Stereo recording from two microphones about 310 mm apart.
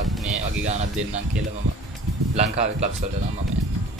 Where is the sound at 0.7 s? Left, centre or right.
Right.